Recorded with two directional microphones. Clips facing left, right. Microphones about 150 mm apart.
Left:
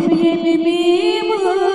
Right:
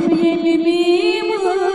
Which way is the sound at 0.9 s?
50° left (ahead or behind).